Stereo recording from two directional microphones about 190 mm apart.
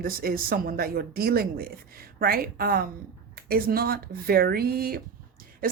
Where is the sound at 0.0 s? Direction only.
50° right (ahead or behind).